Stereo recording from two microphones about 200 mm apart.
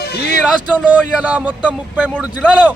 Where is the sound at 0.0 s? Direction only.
55° left (ahead or behind).